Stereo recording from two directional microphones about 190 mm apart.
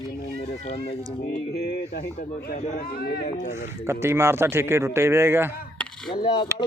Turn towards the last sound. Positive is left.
turn(degrees=25)  # may be behind; listen again after turning